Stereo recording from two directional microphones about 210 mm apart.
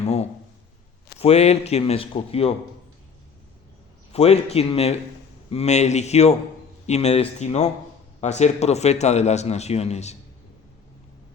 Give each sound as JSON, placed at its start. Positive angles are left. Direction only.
{"t": 0.0, "sound": "a sound", "side_deg": 30}
{"t": 1.2, "sound": "speech", "side_deg": 30}
{"t": 4.1, "sound": "a man's voice", "side_deg": 30}